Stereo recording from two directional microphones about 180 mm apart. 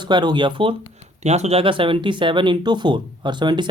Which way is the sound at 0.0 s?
25° right (ahead or behind).